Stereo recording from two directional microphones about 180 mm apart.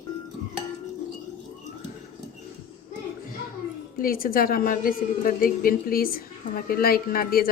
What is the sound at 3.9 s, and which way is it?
A woman's voice, 55° left (ahead or behind).